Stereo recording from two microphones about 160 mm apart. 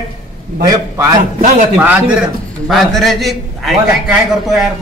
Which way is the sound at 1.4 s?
50° right (ahead or behind).